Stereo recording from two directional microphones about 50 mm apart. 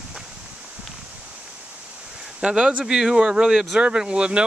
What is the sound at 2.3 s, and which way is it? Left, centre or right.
Speech, right.